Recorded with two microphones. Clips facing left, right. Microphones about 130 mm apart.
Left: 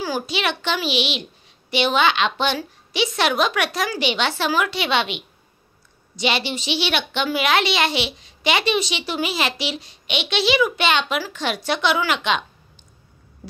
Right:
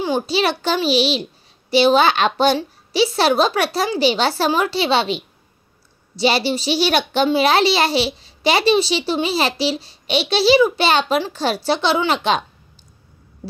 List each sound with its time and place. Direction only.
0.3 s a child's voice: 35° right (ahead or behind)